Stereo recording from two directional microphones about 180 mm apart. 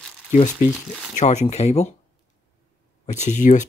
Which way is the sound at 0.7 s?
Centre (ahead or behind).